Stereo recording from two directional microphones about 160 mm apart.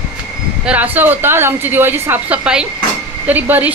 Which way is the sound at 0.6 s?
10° right (ahead or behind).